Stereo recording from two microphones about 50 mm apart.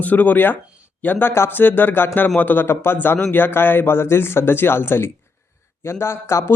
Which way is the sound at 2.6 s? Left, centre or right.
Left.